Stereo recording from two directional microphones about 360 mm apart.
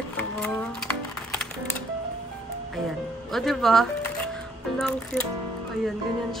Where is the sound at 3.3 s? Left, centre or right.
Centre.